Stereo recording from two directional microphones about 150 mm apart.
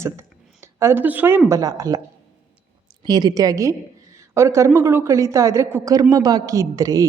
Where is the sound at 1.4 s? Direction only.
20° right (ahead or behind).